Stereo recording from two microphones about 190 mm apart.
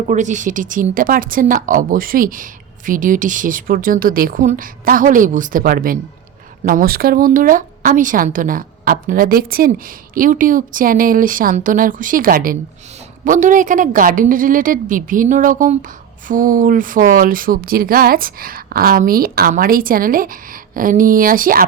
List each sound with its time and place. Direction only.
0.1 s speech: 40° right (ahead or behind)